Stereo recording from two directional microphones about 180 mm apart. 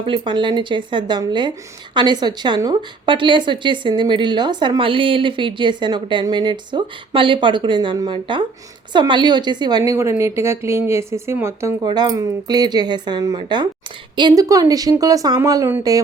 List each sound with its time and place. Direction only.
0.0 s a woman's voice: 30° right (ahead or behind)